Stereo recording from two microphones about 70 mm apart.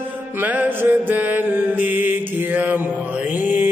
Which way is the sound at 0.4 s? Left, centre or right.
Right.